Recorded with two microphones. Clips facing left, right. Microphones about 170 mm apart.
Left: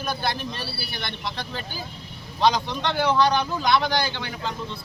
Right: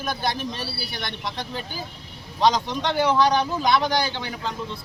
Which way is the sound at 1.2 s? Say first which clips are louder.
Right 1 dB; 15° right (ahead or behind).